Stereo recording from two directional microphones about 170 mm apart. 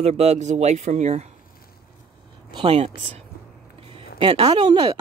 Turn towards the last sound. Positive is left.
turn(degrees=-30)  # may be behind; listen again after turning